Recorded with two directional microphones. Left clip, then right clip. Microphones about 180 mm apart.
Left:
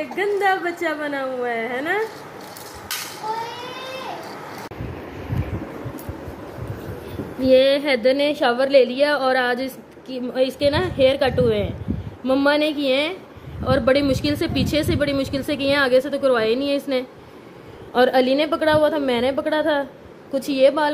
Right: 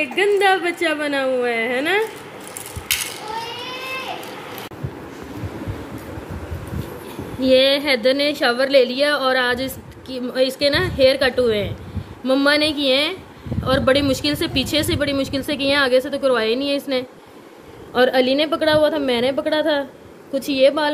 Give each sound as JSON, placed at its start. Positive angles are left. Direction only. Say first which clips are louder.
{"t": 0.1, "sound": "a woman's voice", "louder": "right 3 dB", "side_deg": -20}
{"t": 7.3, "sound": "a woman's voice", "louder": "even", "side_deg": 0}